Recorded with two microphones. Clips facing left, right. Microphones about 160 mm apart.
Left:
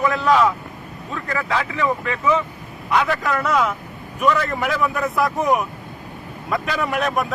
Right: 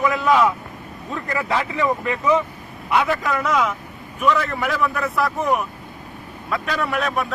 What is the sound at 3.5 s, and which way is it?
A man's voice, 10° left (ahead or behind).